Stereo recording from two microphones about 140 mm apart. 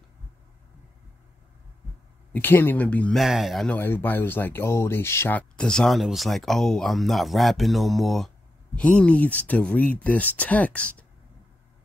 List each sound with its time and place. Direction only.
2.3 s speech: 15° left (ahead or behind)
3.2 s speech: centre (ahead or behind)
3.7 s speech: 15° left (ahead or behind)
5.6 s speech: 5° left (ahead or behind)